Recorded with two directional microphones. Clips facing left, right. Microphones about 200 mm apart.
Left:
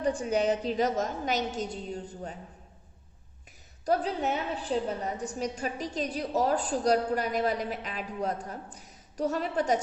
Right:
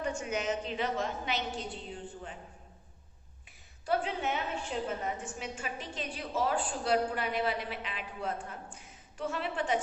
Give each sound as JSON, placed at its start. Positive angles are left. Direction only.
{"t": 0.0, "sound": "a woman's voice", "side_deg": 35}
{"t": 3.8, "sound": "a woman's voice", "side_deg": 40}